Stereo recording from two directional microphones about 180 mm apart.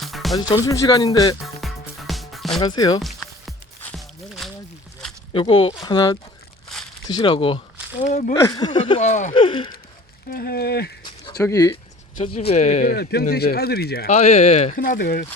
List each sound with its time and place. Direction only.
0.0 s music: centre (ahead or behind)
0.3 s speech: 20° left (ahead or behind)
1.6 s music: centre (ahead or behind)
2.6 s speech: 20° left (ahead or behind)
3.0 s music: centre (ahead or behind)
5.3 s speech: 30° left (ahead or behind)
8.3 s speech: 25° left (ahead or behind)
9.0 s speech: 45° left (ahead or behind)
9.3 s speech: 30° left (ahead or behind)
10.2 s speech: 60° left (ahead or behind)
11.0 s a sound: 20° left (ahead or behind)
11.7 s speech: 30° left (ahead or behind); by 14.1 s 60° left (ahead or behind)
14.1 s speech: 40° left (ahead or behind)
14.8 s speech: 55° left (ahead or behind)